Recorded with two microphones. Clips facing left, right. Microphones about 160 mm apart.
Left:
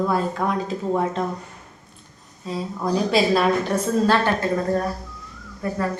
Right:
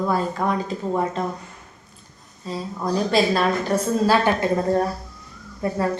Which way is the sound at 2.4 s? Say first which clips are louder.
Left 1 dB; centre (ahead or behind).